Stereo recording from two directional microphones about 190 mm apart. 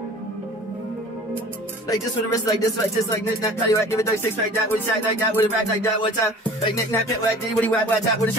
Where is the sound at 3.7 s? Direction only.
15° left (ahead or behind).